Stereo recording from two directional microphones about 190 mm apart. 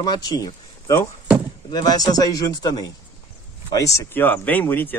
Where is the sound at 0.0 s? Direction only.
20° left (ahead or behind).